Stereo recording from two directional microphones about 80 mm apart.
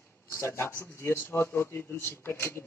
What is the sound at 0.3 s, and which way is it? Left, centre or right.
Speech, left.